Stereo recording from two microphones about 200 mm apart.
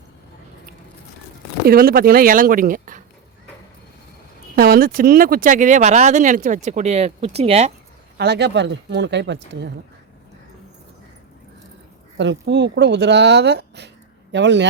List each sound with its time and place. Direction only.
1.6 s speech: 45° right (ahead or behind)
4.5 s speech: 50° right (ahead or behind); by 7.7 s 30° right (ahead or behind)
8.2 s speech: 55° right (ahead or behind)
12.1 s speech: 60° right (ahead or behind)